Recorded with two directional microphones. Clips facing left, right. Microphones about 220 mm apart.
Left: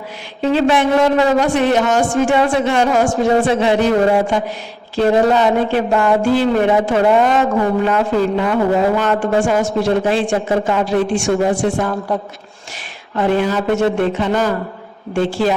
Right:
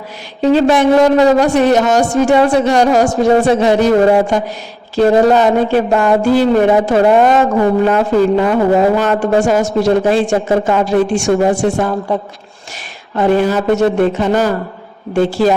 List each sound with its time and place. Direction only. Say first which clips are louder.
0.4 s a woman's voice: right 4 dB; 40° right (ahead or behind)
13.1 s a man's voice: right 4 dB; 40° right (ahead or behind)